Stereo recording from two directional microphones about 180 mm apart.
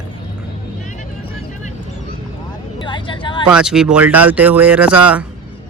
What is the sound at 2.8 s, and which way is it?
Speech, 25° left (ahead or behind).